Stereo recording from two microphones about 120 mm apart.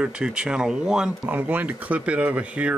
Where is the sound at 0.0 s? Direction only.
5° right (ahead or behind).